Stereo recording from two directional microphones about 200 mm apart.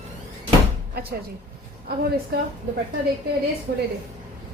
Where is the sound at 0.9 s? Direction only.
55° right (ahead or behind).